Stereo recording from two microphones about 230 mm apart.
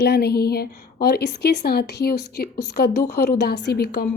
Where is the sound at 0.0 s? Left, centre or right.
Left.